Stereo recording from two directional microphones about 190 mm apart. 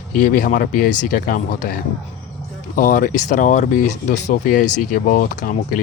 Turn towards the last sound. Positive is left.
turn(degrees=45)  # may be behind; listen again after turning